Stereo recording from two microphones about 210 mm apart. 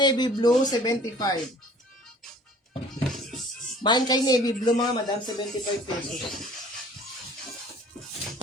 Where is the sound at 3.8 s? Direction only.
20° left (ahead or behind).